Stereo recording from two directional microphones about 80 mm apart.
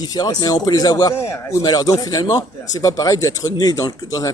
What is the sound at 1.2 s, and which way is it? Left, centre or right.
A man's voice, left.